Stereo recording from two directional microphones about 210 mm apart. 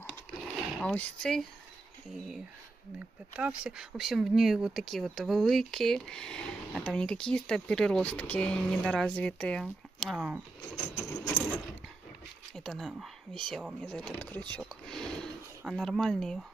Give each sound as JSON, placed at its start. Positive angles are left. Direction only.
{"t": 0.7, "sound": "speech", "side_deg": 0}
{"t": 10.8, "sound": "a sound", "side_deg": 15}
{"t": 12.5, "sound": "speech", "side_deg": 0}